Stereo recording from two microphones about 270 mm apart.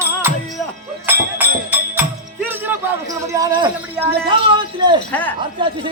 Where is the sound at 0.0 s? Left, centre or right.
Centre.